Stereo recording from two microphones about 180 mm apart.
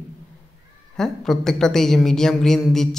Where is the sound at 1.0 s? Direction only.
5° left (ahead or behind).